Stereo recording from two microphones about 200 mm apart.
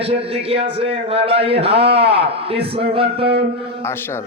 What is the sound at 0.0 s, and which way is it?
A man's voice, 30° right (ahead or behind).